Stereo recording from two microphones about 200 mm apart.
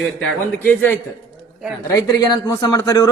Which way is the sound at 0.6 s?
10° left (ahead or behind).